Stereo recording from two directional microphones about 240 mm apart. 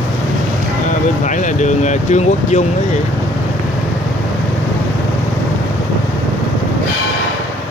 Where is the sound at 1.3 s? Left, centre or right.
Left.